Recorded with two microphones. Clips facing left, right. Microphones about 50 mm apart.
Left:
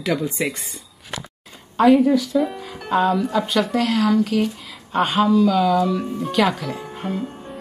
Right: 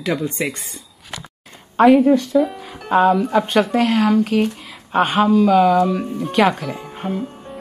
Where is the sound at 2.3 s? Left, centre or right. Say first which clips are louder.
Right 3 dB; centre.